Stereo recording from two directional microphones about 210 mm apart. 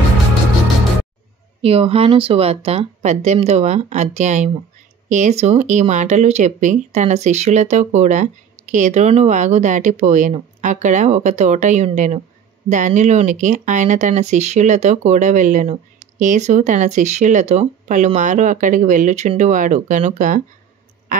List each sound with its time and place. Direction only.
1.6 s speech: 25° right (ahead or behind)